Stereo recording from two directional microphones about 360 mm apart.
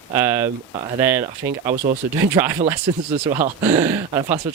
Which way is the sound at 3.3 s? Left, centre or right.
Centre.